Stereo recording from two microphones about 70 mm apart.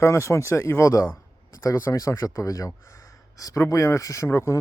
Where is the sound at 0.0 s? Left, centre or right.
Left.